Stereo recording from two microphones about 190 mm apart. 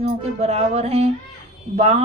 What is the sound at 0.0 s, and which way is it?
A woman's voice, 35° right (ahead or behind).